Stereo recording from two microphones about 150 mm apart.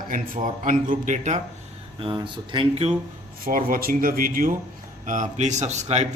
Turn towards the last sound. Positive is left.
turn(degrees=-50)  # may be behind; listen again after turning